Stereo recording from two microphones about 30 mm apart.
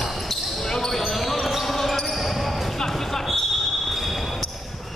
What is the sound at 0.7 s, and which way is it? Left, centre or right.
Basketball bounce, centre.